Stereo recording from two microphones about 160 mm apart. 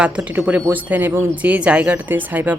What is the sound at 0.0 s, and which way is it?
A woman's voice, 5° right (ahead or behind).